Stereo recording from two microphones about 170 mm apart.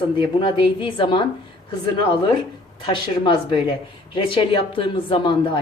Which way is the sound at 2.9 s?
30° left (ahead or behind).